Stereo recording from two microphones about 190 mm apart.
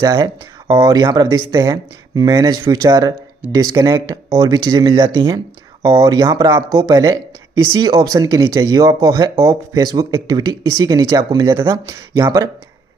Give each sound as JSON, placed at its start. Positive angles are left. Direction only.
{"t": 0.0, "sound": "speech", "side_deg": -15}